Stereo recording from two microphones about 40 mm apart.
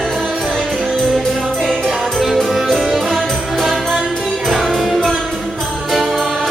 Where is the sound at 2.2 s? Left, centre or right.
Centre.